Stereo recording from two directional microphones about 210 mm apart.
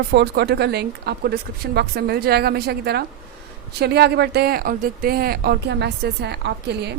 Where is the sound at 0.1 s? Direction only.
50° right (ahead or behind).